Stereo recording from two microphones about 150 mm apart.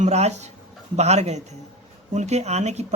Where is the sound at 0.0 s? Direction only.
50° right (ahead or behind).